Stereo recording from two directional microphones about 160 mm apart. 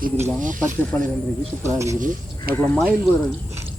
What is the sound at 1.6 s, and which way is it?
Speech, 20° right (ahead or behind).